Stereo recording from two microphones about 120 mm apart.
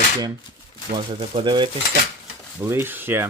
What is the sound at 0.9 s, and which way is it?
Speech, 45° right (ahead or behind).